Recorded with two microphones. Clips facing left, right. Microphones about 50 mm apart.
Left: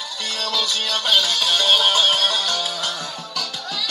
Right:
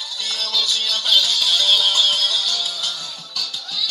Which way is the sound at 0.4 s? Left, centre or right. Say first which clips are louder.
Even; centre.